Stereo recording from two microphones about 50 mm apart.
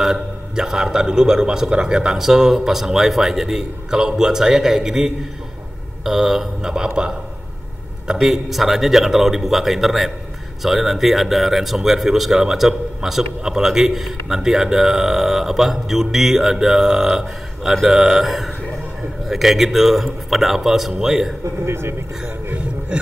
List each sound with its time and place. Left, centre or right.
0.0 s speech: centre
21.6 s speech: right